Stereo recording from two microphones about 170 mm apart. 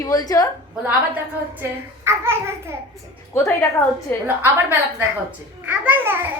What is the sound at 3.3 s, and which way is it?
Speech, 15° left (ahead or behind).